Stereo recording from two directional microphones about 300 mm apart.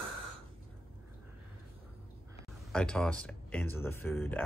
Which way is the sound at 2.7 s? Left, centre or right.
Centre.